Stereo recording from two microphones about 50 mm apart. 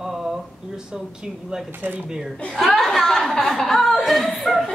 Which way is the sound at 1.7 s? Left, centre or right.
Right.